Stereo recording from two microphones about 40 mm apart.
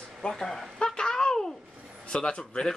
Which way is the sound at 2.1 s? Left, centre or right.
Left.